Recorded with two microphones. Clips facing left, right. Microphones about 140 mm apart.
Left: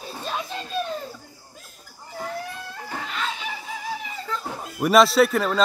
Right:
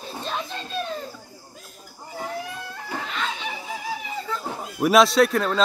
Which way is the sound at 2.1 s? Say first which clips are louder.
Even; 5° right (ahead or behind).